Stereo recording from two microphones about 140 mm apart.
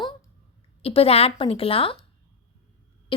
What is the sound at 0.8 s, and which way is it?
Speech, 45° left (ahead or behind).